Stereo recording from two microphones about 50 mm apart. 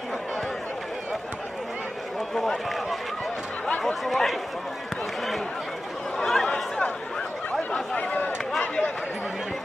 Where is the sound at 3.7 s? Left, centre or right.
Left.